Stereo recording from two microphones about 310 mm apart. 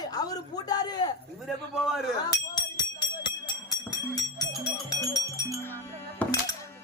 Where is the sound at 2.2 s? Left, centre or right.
Centre.